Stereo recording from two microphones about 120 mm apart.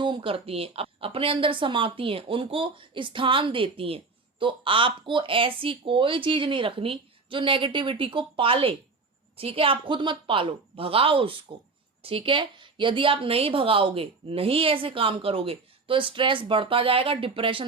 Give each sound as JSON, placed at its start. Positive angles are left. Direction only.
{"t": 0.0, "sound": "speech", "side_deg": -45}